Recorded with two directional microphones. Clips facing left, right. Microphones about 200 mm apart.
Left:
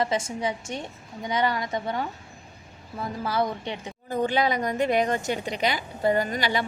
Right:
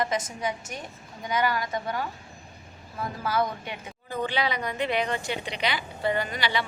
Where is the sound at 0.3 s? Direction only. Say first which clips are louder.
Left 3 dB; 30° left (ahead or behind).